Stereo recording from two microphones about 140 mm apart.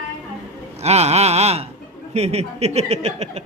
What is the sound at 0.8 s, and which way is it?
Speech, 50° right (ahead or behind).